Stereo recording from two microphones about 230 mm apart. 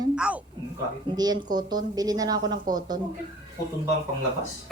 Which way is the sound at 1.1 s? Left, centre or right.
Centre.